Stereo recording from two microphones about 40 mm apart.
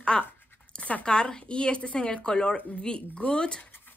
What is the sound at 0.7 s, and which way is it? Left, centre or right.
Speech, left.